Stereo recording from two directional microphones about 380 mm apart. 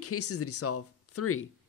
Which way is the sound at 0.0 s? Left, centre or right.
Left.